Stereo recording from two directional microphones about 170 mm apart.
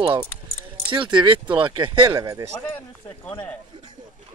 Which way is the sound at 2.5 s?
10° left (ahead or behind).